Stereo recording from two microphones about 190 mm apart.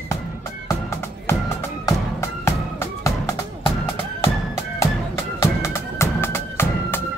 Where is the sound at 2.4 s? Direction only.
15° left (ahead or behind).